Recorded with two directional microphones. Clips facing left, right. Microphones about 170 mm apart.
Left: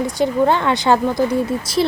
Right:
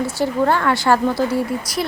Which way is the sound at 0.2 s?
20° left (ahead or behind).